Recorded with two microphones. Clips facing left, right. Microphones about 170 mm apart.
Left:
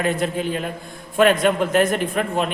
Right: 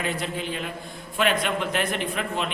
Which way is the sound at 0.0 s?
50° left (ahead or behind).